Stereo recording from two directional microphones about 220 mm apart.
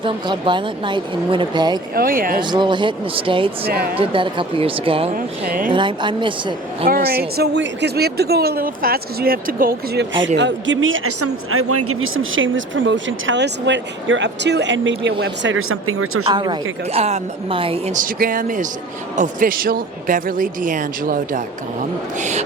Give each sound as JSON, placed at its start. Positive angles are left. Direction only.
{"t": 0.0, "sound": "speech", "side_deg": -20}
{"t": 2.0, "sound": "speech", "side_deg": -40}
{"t": 2.4, "sound": "speech", "side_deg": -20}
{"t": 3.7, "sound": "speech", "side_deg": -45}
{"t": 4.0, "sound": "speech", "side_deg": -25}
{"t": 5.1, "sound": "speech", "side_deg": -40}
{"t": 5.7, "sound": "speech", "side_deg": -20}
{"t": 6.8, "sound": "speech", "side_deg": -45}
{"t": 10.2, "sound": "speech", "side_deg": -55}
{"t": 16.2, "sound": "speech", "side_deg": -20}